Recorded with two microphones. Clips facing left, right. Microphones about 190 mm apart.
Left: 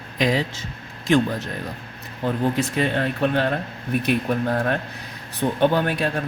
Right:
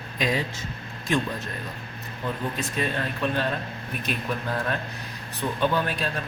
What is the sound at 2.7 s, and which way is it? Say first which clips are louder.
Speech: left 6 dB; 65° left (ahead or behind).